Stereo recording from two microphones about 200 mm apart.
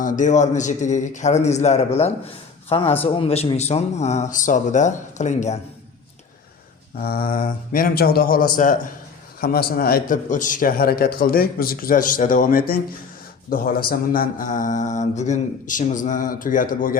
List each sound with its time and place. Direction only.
0.0 s speech: 40° left (ahead or behind)
7.0 s a man's voice: 50° left (ahead or behind)